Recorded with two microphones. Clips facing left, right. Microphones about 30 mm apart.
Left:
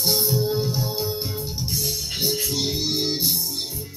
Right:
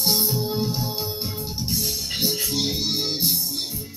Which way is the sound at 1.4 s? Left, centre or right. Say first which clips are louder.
Even; right.